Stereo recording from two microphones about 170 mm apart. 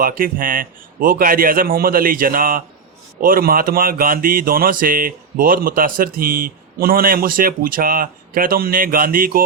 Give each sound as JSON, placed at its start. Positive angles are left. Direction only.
{"t": 0.0, "sound": "speech", "side_deg": -55}